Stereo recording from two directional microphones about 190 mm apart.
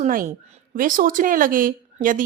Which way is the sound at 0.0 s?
45° right (ahead or behind).